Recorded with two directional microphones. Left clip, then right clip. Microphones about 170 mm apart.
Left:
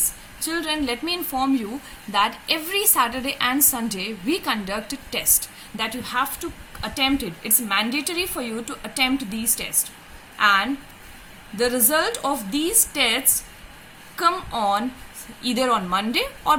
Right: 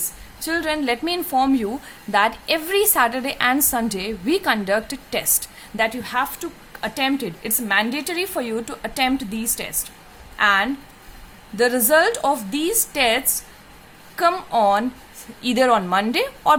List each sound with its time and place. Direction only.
0.3 s a woman's voice: 40° right (ahead or behind)
11.5 s a woman's voice: 40° right (ahead or behind)